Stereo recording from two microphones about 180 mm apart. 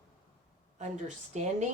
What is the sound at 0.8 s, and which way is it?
Speech, 40° right (ahead or behind).